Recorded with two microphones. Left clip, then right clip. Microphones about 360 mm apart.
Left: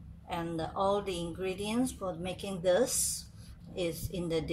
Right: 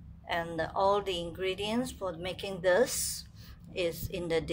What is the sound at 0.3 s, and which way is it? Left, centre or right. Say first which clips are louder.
A woman's voice: right 3 dB; right.